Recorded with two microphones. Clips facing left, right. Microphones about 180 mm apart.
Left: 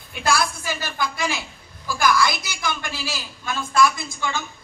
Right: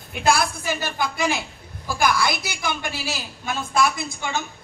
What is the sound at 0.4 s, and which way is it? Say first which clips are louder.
A woman's voice: right 1 dB; 55° right (ahead or behind).